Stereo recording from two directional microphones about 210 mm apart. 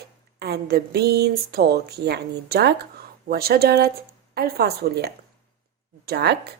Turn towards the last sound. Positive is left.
turn(degrees=-50)  # may be behind; listen again after turning